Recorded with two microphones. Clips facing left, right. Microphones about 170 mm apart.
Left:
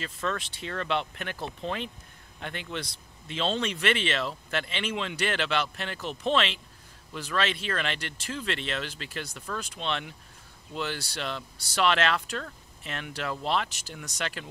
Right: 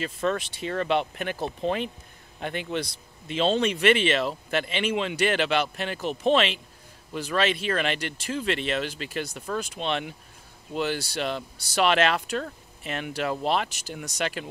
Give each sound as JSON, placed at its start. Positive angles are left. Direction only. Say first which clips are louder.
{"t": 0.0, "sound": "speech", "louder": "right 6 dB", "side_deg": -15}